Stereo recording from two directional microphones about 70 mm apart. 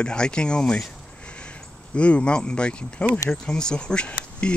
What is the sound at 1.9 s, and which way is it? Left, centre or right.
Speech, centre.